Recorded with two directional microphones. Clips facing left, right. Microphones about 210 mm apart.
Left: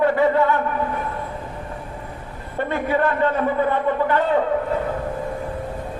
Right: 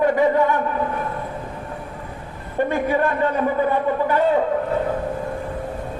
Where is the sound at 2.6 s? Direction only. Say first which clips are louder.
Even; 15° right (ahead or behind).